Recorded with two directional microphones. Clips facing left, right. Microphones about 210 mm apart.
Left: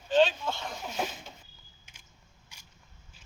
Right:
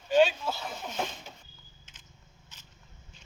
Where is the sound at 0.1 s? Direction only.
10° right (ahead or behind).